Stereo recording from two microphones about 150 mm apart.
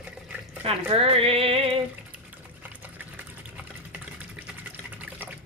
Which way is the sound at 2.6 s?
10° right (ahead or behind).